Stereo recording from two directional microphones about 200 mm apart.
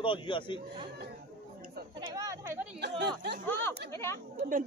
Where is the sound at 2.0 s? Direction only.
15° right (ahead or behind).